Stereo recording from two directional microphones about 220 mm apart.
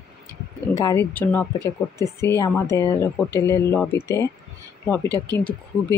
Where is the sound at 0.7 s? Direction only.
10° left (ahead or behind).